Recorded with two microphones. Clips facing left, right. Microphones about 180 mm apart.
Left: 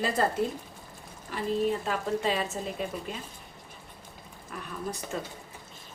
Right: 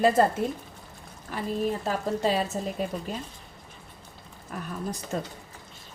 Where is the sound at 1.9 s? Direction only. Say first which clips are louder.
Right 2 dB; 35° right (ahead or behind).